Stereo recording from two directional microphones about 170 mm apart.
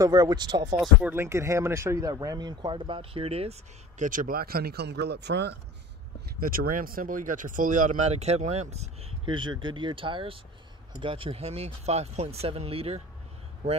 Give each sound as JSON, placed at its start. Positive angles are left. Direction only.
{"t": 0.0, "sound": "speech", "side_deg": -20}
{"t": 0.7, "sound": "speech", "side_deg": -10}
{"t": 4.0, "sound": "speech", "side_deg": -50}
{"t": 6.4, "sound": "speech", "side_deg": -60}
{"t": 9.2, "sound": "speech", "side_deg": -30}